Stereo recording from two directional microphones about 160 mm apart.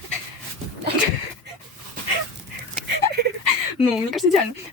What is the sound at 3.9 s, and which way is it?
Speech, centre (ahead or behind).